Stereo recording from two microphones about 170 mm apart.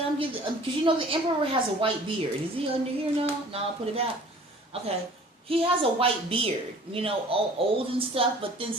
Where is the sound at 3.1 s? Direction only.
35° right (ahead or behind).